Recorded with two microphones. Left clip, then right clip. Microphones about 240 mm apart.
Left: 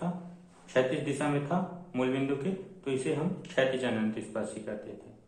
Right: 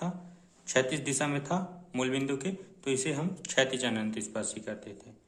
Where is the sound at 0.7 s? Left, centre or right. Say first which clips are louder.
Left 1 dB; right.